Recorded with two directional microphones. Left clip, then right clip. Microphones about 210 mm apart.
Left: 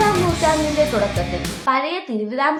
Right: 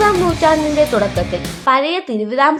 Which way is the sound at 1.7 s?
40° right (ahead or behind).